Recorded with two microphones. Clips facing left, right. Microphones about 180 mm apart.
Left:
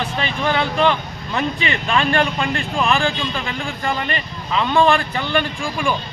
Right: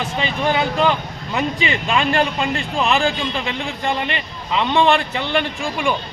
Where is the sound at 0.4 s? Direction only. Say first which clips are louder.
Even; 10° right (ahead or behind).